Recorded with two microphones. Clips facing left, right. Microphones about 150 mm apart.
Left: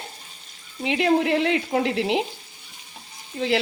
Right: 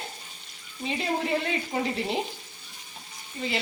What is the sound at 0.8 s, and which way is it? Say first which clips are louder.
Speech: left 8 dB; 75° left (ahead or behind).